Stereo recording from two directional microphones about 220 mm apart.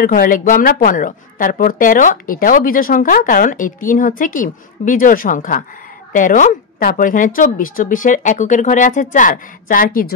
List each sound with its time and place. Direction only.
0.0 s a woman's voice: 40° left (ahead or behind)